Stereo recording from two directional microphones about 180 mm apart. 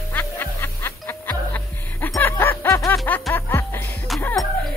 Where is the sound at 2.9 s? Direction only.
5° left (ahead or behind).